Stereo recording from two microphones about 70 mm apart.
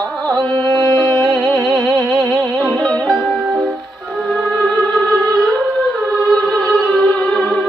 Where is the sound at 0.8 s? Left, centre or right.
Left.